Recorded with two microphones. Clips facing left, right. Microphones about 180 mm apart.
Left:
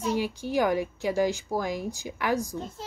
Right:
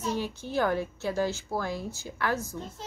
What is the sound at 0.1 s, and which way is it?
Speech, 10° left (ahead or behind).